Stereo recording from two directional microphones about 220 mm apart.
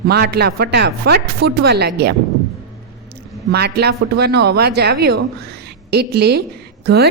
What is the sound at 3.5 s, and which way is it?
A woman's voice, 45° right (ahead or behind).